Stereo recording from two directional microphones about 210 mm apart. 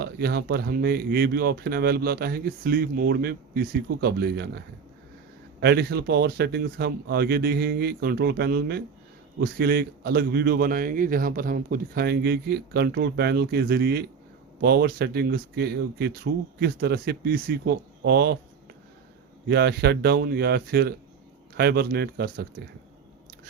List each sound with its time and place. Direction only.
0.0 s a man's voice: 50° right (ahead or behind)
5.5 s a man's voice: 50° right (ahead or behind)
19.5 s a man's voice: 50° right (ahead or behind)